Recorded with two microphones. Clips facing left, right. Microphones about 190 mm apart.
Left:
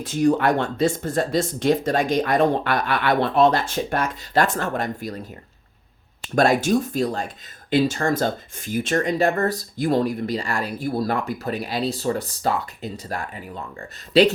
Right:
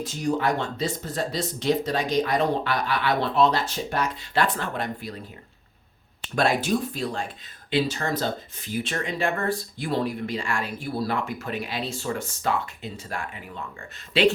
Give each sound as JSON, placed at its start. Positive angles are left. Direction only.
{"t": 0.0, "sound": "speech", "side_deg": 60}
{"t": 6.2, "sound": "speech", "side_deg": 45}